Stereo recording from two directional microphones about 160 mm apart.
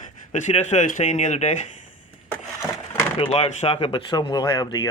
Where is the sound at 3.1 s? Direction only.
35° left (ahead or behind).